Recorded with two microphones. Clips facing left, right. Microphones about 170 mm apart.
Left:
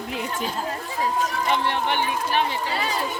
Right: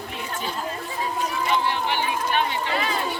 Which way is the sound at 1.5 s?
60° left (ahead or behind).